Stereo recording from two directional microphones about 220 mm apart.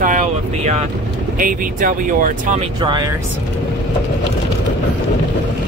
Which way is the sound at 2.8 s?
20° right (ahead or behind).